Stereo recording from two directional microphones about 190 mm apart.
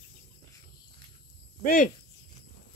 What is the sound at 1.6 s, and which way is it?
Speech, 45° left (ahead or behind).